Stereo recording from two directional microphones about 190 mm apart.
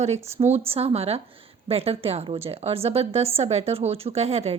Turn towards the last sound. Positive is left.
turn(degrees=-35)  # may be behind; listen again after turning